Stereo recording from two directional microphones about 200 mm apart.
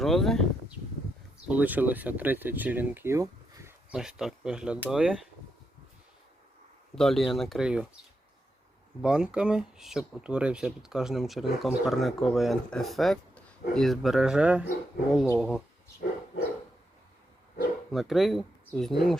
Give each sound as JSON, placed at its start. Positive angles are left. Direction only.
{"t": 0.0, "sound": "speech", "side_deg": 0}
{"t": 1.5, "sound": "speech", "side_deg": -10}
{"t": 6.9, "sound": "speech", "side_deg": 0}
{"t": 9.0, "sound": "speech", "side_deg": -5}
{"t": 17.9, "sound": "speech", "side_deg": 0}